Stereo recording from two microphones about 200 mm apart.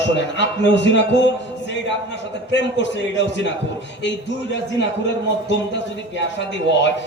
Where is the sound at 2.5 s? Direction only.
65° left (ahead or behind).